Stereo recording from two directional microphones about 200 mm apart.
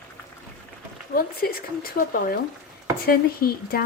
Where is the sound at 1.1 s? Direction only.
50° left (ahead or behind).